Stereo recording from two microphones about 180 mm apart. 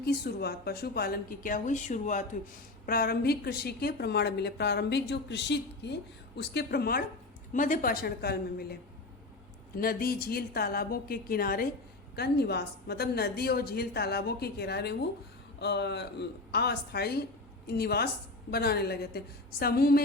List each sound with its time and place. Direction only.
0.0 s a woman's voice: 60° left (ahead or behind); by 2.2 s 45° left (ahead or behind)
2.8 s a woman's voice: 55° left (ahead or behind)
7.5 s a woman's voice: 45° left (ahead or behind)